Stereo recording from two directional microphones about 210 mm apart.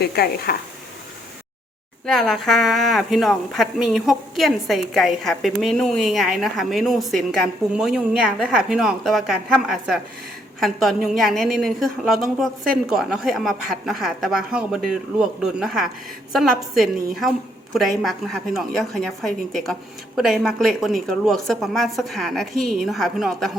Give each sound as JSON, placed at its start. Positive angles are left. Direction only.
{"t": 0.0, "sound": "speech", "side_deg": 50}
{"t": 2.0, "sound": "a woman's voice", "side_deg": 0}